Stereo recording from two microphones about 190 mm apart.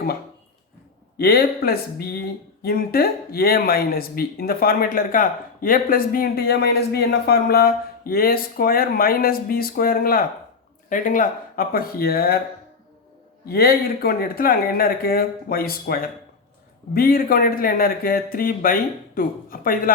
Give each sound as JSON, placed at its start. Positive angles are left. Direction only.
{"t": 1.2, "sound": "speech", "side_deg": 55}
{"t": 13.4, "sound": "speech", "side_deg": 55}